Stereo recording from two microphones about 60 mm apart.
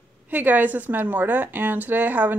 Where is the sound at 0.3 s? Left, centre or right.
Right.